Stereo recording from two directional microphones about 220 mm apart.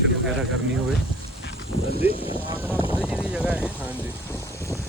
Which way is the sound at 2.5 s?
10° right (ahead or behind).